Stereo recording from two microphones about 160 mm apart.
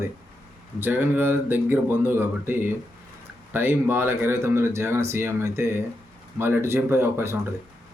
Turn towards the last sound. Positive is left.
turn(degrees=-15)  # may be behind; listen again after turning